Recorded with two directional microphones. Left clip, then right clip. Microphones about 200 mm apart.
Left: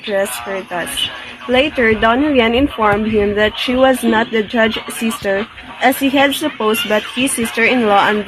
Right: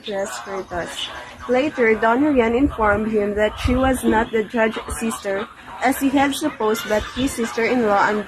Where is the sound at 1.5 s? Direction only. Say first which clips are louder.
Left 5 dB; 40° left (ahead or behind).